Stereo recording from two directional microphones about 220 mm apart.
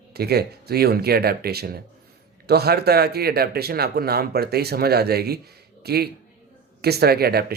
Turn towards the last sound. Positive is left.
turn(degrees=-45)  # may be behind; listen again after turning